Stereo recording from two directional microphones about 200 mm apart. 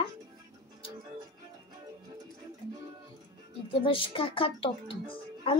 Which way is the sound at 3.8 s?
25° left (ahead or behind).